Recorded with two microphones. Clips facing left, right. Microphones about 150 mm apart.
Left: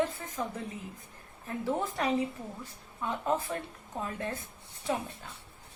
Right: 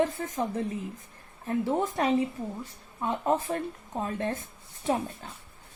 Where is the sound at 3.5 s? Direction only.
35° right (ahead or behind).